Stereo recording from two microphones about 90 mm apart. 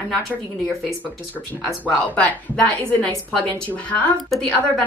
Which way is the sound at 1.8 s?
15° left (ahead or behind).